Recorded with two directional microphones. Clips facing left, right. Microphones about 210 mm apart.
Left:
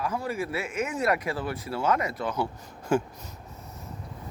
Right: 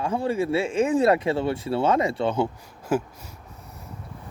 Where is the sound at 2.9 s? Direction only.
5° right (ahead or behind).